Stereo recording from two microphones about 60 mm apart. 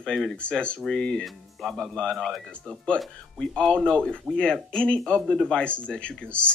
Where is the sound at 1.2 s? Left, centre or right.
Centre.